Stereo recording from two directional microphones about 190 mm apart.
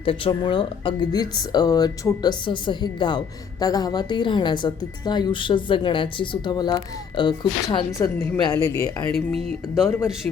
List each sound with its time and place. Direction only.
0.0 s speech: 30° left (ahead or behind)
8.4 s speech: 15° left (ahead or behind)
9.3 s speech: centre (ahead or behind)